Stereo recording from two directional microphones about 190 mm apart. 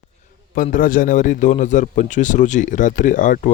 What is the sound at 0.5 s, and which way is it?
A man's voice, 45° left (ahead or behind).